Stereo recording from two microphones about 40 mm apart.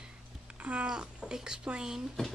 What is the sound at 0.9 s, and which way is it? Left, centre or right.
Speech, centre.